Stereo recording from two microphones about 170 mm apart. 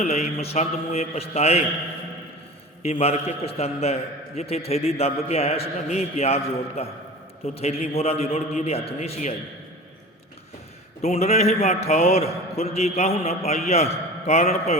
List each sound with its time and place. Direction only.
0.0 s a man's voice: 40° left (ahead or behind)
2.8 s a man's voice: 35° left (ahead or behind)
11.0 s a man's voice: 40° left (ahead or behind)